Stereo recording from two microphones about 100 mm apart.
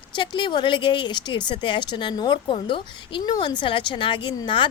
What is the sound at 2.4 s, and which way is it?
A woman's voice, 55° left (ahead or behind).